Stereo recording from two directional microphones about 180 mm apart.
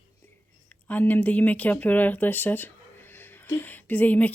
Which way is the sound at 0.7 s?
10° left (ahead or behind).